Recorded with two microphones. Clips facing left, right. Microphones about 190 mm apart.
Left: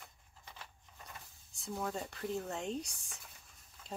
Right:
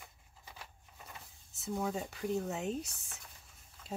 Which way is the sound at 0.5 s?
5° right (ahead or behind).